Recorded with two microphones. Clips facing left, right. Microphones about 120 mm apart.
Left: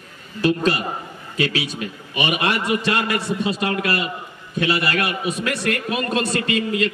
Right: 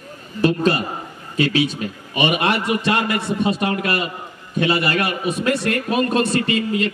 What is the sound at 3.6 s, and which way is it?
A man's voice, 25° right (ahead or behind).